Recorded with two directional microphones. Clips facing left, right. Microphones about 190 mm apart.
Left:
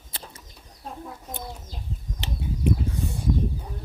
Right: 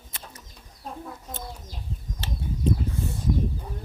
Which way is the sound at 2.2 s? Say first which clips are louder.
Left 1 dB; 15° left (ahead or behind).